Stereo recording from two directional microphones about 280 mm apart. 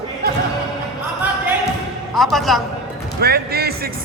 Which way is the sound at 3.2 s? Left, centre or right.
Right.